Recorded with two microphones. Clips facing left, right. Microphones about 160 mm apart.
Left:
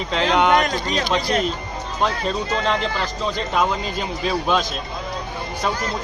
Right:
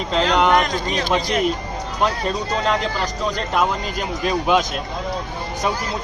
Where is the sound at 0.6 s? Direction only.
40° left (ahead or behind).